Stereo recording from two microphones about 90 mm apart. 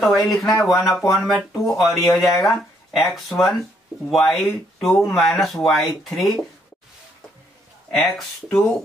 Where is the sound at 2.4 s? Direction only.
Centre (ahead or behind).